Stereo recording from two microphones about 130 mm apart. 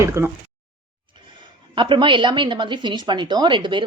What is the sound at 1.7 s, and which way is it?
A woman's voice, 40° right (ahead or behind).